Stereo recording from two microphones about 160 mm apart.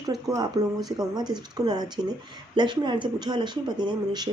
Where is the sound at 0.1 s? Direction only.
25° right (ahead or behind).